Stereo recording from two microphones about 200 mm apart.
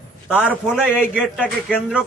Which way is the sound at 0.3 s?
5° right (ahead or behind).